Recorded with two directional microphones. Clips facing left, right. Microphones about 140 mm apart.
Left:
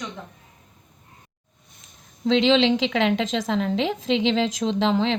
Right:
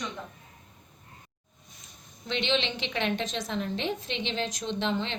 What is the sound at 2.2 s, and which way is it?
A woman's voice, 90° left.